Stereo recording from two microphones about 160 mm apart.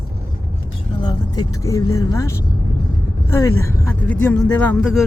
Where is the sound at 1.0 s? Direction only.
25° left (ahead or behind).